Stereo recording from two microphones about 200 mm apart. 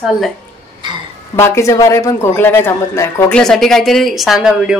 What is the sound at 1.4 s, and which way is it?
A man's voice, 15° left (ahead or behind).